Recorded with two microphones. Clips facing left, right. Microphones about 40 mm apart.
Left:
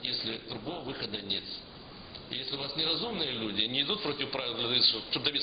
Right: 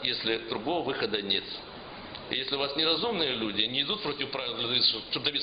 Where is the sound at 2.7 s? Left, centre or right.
Right.